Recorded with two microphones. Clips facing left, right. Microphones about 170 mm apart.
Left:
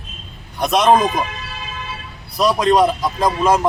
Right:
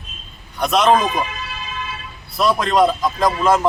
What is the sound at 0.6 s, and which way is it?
Speech, 15° left (ahead or behind).